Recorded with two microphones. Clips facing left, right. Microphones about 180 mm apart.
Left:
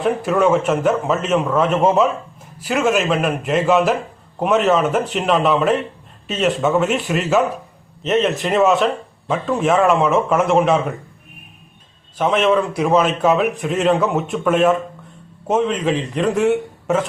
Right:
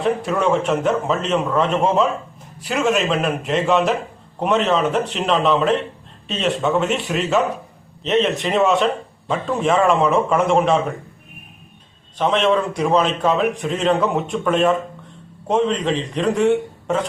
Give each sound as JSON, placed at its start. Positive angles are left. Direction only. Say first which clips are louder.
{"t": 0.0, "sound": "a man's voice", "louder": "left 3 dB", "side_deg": 0}
{"t": 12.1, "sound": "a man's voice", "louder": "left 1 dB", "side_deg": 5}